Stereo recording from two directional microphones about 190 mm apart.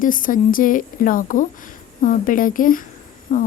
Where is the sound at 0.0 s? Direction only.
45° left (ahead or behind).